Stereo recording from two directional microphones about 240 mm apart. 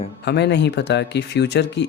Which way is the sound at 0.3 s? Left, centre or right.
Left.